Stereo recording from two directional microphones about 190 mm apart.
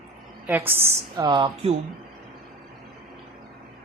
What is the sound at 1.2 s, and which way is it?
Speech, 25° right (ahead or behind).